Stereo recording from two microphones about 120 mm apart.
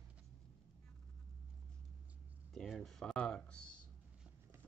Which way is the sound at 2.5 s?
5° left (ahead or behind).